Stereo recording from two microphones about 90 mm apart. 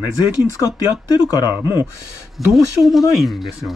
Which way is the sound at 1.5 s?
25° right (ahead or behind).